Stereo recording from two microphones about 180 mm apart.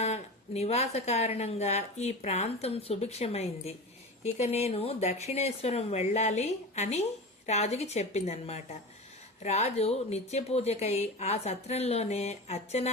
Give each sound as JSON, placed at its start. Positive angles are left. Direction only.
{"t": 0.0, "sound": "speech", "side_deg": 35}